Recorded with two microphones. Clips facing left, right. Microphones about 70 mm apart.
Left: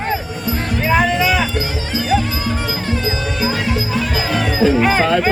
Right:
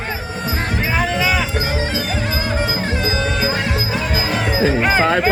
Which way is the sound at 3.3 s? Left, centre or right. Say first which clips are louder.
Left 1 dB; right.